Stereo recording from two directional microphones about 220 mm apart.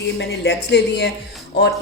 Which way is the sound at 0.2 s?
50° left (ahead or behind).